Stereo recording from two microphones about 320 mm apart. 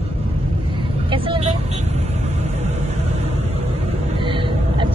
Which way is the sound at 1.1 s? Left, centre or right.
Centre.